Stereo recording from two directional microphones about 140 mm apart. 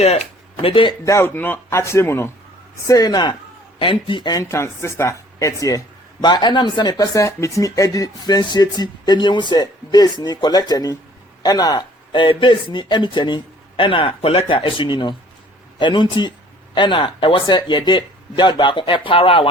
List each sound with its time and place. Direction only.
0.0 s speech: 50° left (ahead or behind)
1.0 s speech: 20° left (ahead or behind); by 19.5 s 40° left (ahead or behind)